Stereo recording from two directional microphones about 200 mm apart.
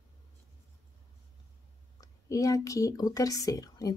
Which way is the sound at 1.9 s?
15° left (ahead or behind).